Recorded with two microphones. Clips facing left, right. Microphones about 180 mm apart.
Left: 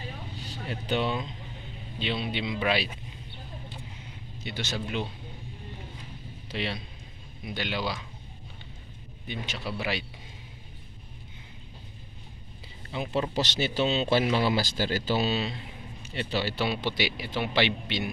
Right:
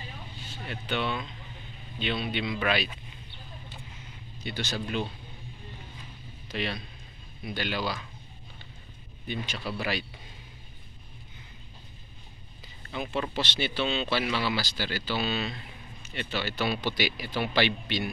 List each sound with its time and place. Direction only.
0.4 s speech: 40° left (ahead or behind)
2.0 s speech: 25° left (ahead or behind)
4.4 s speech: 25° left (ahead or behind)
6.5 s speech: 25° left (ahead or behind)
9.3 s speech: 20° left (ahead or behind)
12.9 s speech: 25° left (ahead or behind)
13.3 s speech: 40° left (ahead or behind); by 18.1 s 25° left (ahead or behind)